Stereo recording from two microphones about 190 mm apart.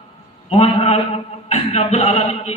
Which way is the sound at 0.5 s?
30° left (ahead or behind).